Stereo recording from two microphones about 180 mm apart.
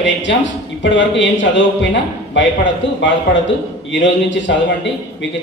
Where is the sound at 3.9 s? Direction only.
85° left.